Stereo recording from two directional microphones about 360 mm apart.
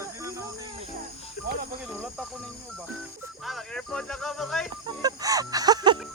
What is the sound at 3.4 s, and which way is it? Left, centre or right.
Speech, centre.